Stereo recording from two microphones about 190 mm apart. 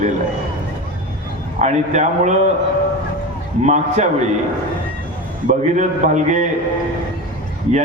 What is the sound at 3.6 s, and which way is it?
Speech, 40° right (ahead or behind).